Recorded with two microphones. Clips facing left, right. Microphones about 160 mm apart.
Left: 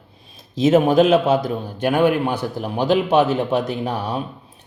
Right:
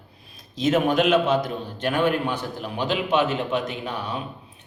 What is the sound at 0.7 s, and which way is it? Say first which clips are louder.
A man's voice: left 5 dB; 30° left (ahead or behind).